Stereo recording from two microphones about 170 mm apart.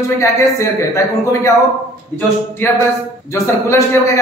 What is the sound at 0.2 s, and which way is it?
Speech, 15° left (ahead or behind).